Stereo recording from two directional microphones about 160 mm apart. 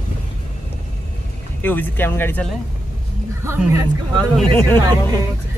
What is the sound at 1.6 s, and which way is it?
Speech, 10° left (ahead or behind).